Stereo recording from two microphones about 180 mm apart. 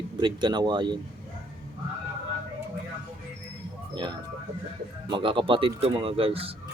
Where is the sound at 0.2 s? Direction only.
25° right (ahead or behind).